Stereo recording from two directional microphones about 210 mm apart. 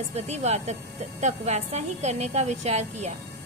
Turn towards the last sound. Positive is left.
turn(degrees=-30)  # may be behind; listen again after turning